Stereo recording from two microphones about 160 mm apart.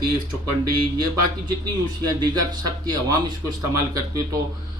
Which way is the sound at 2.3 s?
25° right (ahead or behind).